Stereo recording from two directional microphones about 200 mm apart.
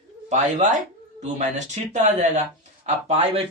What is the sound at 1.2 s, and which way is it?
Speech, 35° right (ahead or behind).